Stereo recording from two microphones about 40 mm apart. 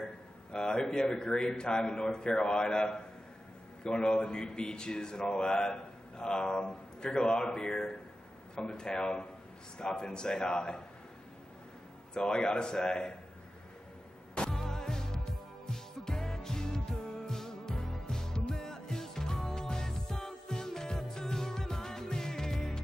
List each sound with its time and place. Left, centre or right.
0.5 s speech: left
12.1 s speech: centre
14.5 s music: centre